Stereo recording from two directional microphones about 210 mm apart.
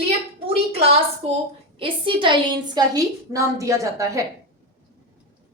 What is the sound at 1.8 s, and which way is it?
A woman's voice, 25° right (ahead or behind).